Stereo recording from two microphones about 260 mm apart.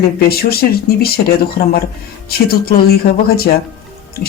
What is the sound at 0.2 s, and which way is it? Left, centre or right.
Speech, left.